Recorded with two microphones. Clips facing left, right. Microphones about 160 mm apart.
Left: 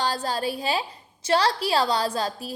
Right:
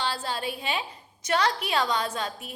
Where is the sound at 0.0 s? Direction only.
40° left (ahead or behind).